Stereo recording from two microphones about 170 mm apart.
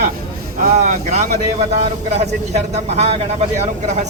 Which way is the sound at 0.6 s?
45° right (ahead or behind).